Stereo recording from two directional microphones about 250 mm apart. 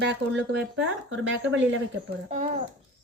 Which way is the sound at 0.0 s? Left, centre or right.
Right.